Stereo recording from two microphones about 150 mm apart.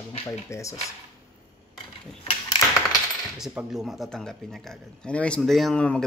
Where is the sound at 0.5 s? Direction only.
20° left (ahead or behind).